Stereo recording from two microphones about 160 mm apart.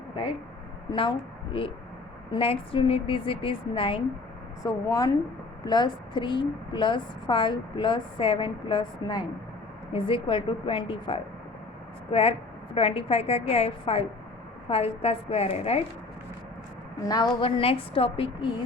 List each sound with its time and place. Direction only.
0.9 s a woman's voice: 30° left (ahead or behind)
2.3 s a woman's voice: 35° left (ahead or behind)
12.7 s a woman's voice: 35° left (ahead or behind)
17.1 s a woman's voice: 25° left (ahead or behind)
17.6 s a woman's voice: 35° left (ahead or behind)